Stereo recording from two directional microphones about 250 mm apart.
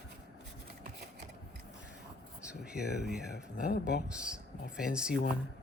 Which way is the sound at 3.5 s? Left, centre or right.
Left.